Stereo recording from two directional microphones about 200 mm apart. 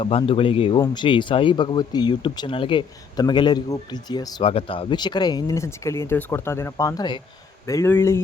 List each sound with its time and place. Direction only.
0.0 s speech: 30° left (ahead or behind); by 8.2 s 10° left (ahead or behind)